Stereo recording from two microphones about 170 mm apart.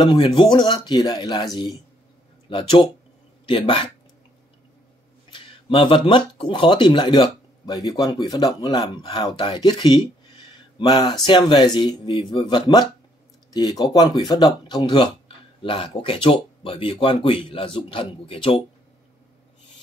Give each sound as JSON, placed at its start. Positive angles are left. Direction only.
{"t": 0.0, "sound": "speech", "side_deg": 30}
{"t": 5.3, "sound": "speech", "side_deg": 35}